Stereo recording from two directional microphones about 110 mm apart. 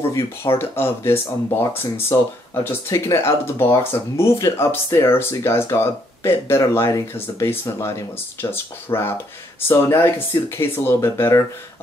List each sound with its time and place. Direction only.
0.1 s speech: 25° left (ahead or behind)